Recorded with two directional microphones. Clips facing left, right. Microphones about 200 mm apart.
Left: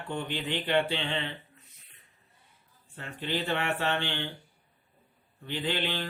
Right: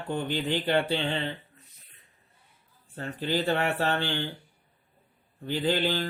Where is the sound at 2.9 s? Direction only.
40° right (ahead or behind).